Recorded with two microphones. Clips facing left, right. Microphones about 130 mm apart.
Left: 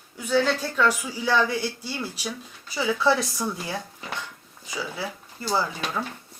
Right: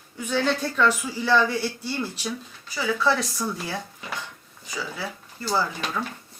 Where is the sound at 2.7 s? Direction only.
25° left (ahead or behind).